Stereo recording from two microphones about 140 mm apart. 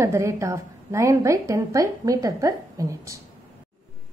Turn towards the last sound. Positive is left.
turn(degrees=-25)  # may be behind; listen again after turning